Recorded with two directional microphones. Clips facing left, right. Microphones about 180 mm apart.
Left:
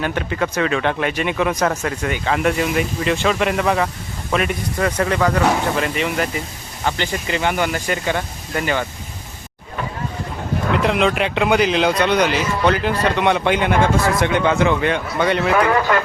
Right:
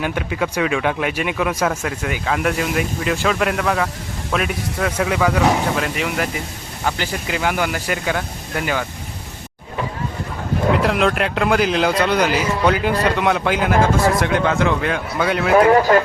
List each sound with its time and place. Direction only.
0.0 s speech: 10° right (ahead or behind)
10.8 s speech: centre (ahead or behind)
15.5 s speech: 35° right (ahead or behind)